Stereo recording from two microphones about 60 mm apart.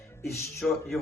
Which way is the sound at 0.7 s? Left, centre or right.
Centre.